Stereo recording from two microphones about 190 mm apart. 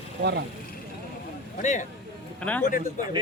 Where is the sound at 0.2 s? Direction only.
60° right (ahead or behind).